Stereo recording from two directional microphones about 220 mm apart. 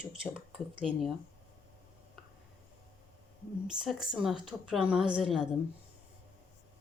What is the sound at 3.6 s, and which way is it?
A woman's voice, centre (ahead or behind).